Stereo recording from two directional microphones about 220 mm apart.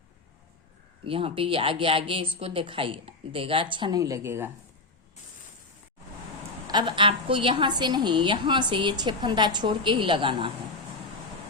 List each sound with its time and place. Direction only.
1.0 s a woman's voice: 25° right (ahead or behind)
6.7 s a woman's voice: 20° right (ahead or behind)